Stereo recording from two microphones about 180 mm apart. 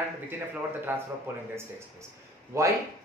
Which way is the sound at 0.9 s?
10° right (ahead or behind).